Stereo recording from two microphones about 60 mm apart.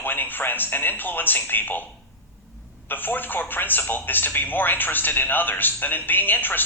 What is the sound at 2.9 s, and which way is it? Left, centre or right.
Speech, left.